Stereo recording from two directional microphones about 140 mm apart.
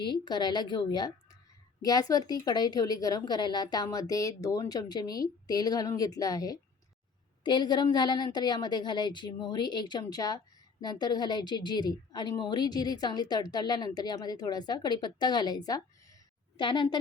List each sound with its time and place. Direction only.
0.0 s a woman's voice: 30° left (ahead or behind)